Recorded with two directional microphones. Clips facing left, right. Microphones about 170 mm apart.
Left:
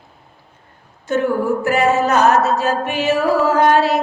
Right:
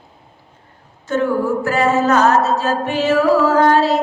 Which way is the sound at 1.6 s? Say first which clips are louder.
Even; 15° left (ahead or behind).